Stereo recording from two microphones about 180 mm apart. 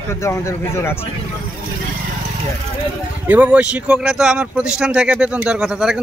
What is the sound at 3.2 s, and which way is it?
Speech, 10° right (ahead or behind).